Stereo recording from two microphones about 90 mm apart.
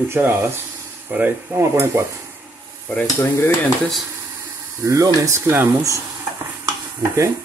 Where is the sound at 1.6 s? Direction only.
30° right (ahead or behind).